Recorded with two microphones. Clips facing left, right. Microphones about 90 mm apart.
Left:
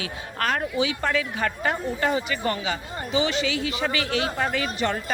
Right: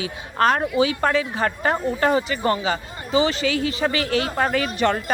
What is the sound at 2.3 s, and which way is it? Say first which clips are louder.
Speech: right 5 dB; 30° right (ahead or behind).